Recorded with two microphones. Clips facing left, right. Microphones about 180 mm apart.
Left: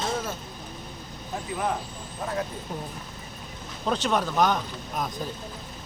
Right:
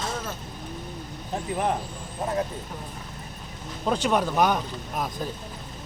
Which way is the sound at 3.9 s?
10° right (ahead or behind).